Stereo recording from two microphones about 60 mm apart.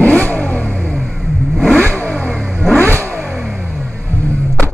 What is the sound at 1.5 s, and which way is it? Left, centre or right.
Vehicle, centre.